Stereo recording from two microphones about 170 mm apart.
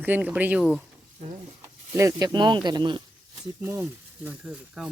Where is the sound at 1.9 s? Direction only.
15° right (ahead or behind).